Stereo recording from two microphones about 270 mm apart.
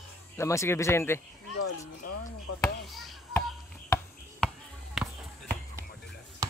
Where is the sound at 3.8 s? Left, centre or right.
Centre.